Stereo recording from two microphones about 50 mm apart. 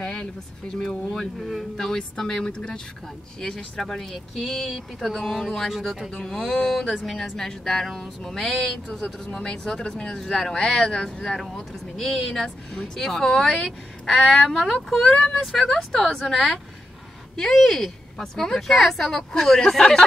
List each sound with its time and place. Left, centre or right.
0.0 s speech: centre
1.4 s a woman's voice: centre
1.9 s speech: centre
4.4 s a woman's voice: centre
6.2 s speech: centre
10.1 s a woman's voice: centre
12.0 s speech: centre
15.1 s a woman's voice: centre